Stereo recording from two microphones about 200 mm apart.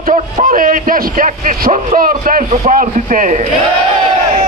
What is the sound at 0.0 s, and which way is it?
A man's voice, 40° right (ahead or behind).